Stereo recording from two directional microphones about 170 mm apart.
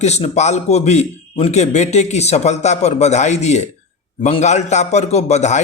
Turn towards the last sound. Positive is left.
turn(degrees=40)  # may be behind; listen again after turning